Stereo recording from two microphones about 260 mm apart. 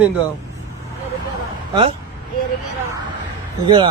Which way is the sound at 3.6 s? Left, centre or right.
Centre.